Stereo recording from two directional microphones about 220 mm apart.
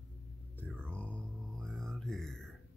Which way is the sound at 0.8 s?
5° left (ahead or behind).